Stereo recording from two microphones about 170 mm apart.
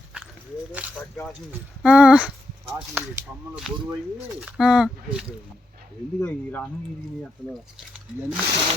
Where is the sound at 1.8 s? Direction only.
5° right (ahead or behind).